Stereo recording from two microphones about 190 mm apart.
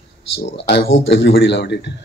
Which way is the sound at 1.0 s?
65° left (ahead or behind).